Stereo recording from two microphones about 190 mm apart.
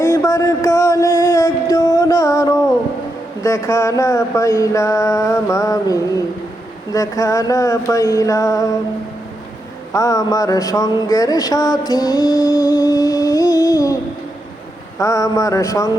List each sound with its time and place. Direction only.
0.0 s music: 15° left (ahead or behind)
3.4 s mantra: 15° left (ahead or behind)
9.9 s speech: 15° left (ahead or behind)
11.9 s music: 20° left (ahead or behind)
14.9 s mantra: 15° left (ahead or behind)